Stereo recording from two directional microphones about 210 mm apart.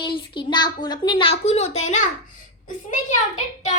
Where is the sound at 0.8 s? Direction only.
20° left (ahead or behind).